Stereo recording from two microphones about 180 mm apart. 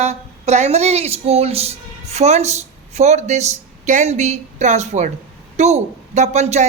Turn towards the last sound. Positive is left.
turn(degrees=-40)  # may be behind; listen again after turning